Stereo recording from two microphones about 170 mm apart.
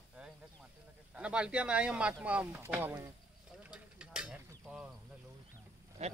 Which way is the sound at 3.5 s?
5° right (ahead or behind).